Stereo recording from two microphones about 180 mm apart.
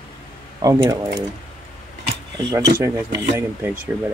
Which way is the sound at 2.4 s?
20° right (ahead or behind).